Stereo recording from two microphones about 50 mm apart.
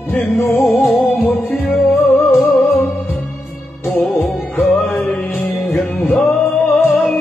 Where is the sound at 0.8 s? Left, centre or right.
Centre.